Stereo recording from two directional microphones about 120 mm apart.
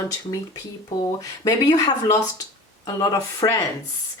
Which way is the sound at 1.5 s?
35° left (ahead or behind).